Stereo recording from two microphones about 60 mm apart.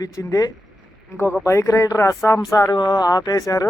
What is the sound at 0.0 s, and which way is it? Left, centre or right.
Speech, left.